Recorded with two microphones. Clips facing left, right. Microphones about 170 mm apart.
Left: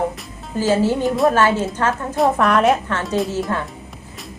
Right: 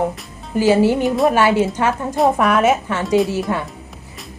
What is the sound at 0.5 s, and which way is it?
Speech, 15° right (ahead or behind).